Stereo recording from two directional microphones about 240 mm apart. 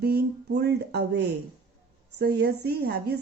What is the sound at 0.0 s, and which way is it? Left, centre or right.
A woman's voice, right.